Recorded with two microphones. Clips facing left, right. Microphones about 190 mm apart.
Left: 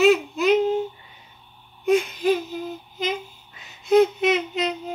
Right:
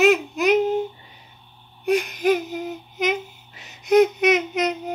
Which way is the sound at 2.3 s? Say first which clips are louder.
Right 2 dB; 20° right (ahead or behind).